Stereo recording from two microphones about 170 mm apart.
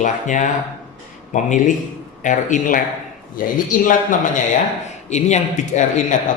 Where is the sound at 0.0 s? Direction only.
50° left (ahead or behind).